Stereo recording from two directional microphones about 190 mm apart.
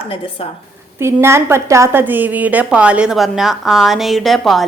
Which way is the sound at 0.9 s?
15° right (ahead or behind).